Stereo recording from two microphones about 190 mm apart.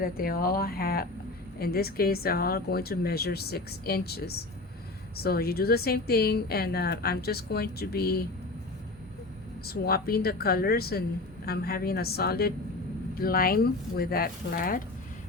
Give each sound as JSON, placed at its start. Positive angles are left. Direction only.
{"t": 0.0, "sound": "a woman's voice", "side_deg": 50}
{"t": 9.6, "sound": "a woman's voice", "side_deg": 55}